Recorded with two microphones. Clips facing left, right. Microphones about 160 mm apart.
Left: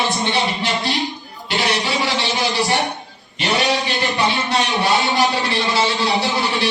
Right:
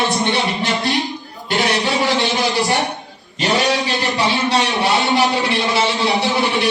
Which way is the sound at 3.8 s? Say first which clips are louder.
Right 1 dB; 40° right (ahead or behind).